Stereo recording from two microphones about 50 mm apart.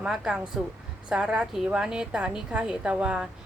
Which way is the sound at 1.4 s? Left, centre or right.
Centre.